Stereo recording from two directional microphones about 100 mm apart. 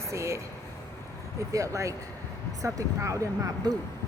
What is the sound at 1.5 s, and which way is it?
Speech, 30° right (ahead or behind).